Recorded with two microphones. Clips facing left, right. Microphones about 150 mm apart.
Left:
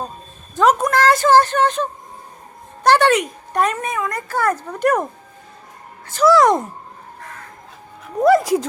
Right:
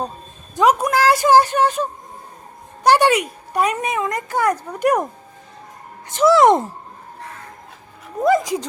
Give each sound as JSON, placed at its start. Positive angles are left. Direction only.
{"t": 0.5, "sound": "speech", "side_deg": -10}
{"t": 6.1, "sound": "speech", "side_deg": -25}
{"t": 8.2, "sound": "speech", "side_deg": 0}